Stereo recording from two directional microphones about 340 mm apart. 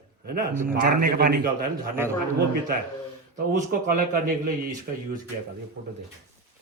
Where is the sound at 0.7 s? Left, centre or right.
Right.